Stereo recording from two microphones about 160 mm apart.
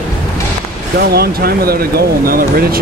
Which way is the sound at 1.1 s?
75° right (ahead or behind).